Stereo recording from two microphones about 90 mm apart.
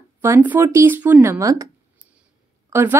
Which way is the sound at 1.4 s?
40° right (ahead or behind).